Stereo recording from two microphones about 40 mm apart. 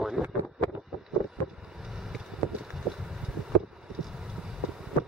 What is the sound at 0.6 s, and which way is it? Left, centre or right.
Wind, left.